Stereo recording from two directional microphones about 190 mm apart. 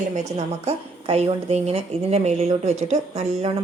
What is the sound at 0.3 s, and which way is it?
A woman's voice, 35° right (ahead or behind).